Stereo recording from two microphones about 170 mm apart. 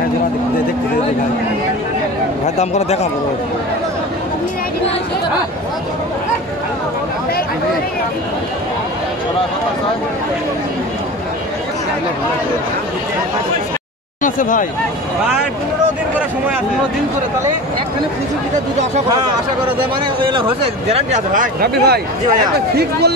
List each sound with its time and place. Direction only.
2.4 s speech: 40° left (ahead or behind)
14.2 s speech: 50° left (ahead or behind)
20.3 s speech: 35° right (ahead or behind)
21.3 s speech: 55° right (ahead or behind)